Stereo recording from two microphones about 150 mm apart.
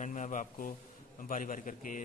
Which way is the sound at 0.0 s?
55° left (ahead or behind).